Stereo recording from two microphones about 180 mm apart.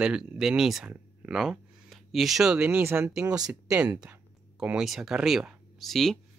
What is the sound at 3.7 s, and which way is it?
Speech, 5° right (ahead or behind).